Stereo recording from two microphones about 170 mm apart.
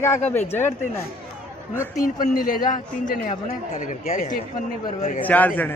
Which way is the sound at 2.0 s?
50° left (ahead or behind).